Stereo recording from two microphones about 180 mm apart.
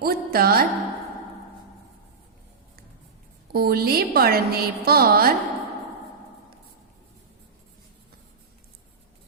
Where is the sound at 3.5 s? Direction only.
60° right (ahead or behind).